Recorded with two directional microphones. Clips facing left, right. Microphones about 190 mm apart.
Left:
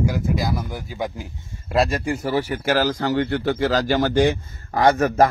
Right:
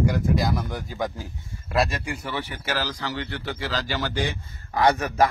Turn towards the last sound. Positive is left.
turn(degrees=45)  # may be behind; listen again after turning